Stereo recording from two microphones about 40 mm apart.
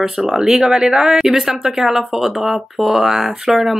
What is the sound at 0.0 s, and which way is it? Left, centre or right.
Speech, centre.